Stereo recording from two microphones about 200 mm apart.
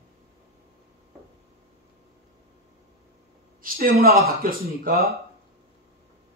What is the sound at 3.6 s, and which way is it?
Speech, 45° right (ahead or behind).